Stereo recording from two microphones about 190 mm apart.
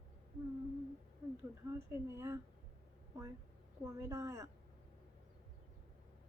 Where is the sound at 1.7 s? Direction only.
15° right (ahead or behind).